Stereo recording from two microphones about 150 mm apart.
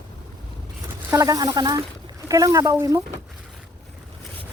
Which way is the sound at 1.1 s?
20° right (ahead or behind).